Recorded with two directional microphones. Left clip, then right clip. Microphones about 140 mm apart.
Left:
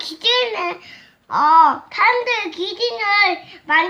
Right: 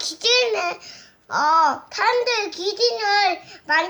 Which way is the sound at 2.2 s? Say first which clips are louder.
Left 1 dB; 25° left (ahead or behind).